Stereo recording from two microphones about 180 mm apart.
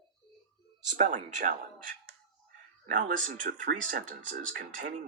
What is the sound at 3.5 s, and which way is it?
Speech, 60° right (ahead or behind).